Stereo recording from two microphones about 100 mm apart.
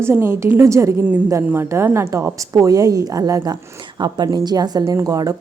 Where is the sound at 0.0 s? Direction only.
25° right (ahead or behind).